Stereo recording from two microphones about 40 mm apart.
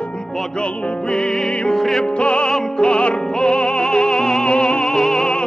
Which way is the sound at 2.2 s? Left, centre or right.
Left.